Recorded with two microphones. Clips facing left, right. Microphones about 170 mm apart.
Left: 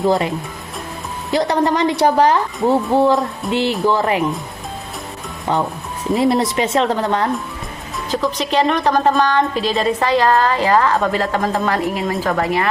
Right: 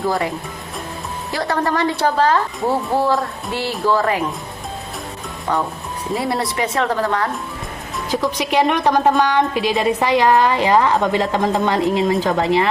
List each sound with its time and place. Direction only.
0.1 s a woman's voice: 20° left (ahead or behind)
6.1 s speech: 20° left (ahead or behind)
8.1 s a woman's voice: 10° right (ahead or behind)